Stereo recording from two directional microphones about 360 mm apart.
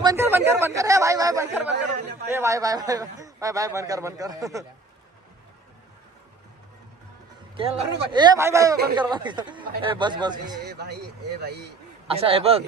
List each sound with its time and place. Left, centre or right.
0.0 s a man's voice: centre
7.5 s a man's voice: centre
10.6 s speech: right
12.1 s a man's voice: centre